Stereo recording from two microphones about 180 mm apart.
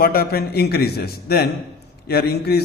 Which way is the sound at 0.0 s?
55° left (ahead or behind).